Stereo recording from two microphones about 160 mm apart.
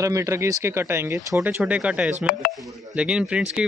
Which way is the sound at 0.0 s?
20° right (ahead or behind).